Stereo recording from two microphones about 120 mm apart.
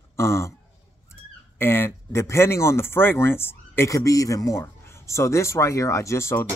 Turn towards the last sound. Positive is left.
turn(degrees=25)  # may be behind; listen again after turning